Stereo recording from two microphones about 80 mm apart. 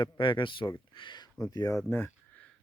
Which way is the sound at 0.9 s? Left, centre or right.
Left.